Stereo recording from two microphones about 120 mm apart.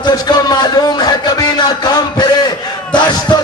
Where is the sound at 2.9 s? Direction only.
35° left (ahead or behind).